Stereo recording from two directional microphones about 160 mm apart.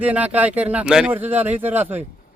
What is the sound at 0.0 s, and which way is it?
Speech, 10° right (ahead or behind).